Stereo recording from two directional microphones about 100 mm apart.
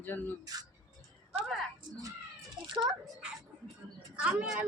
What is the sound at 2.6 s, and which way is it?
Speech, 55° right (ahead or behind).